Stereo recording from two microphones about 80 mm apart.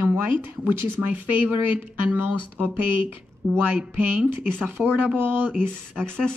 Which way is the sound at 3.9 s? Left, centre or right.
Right.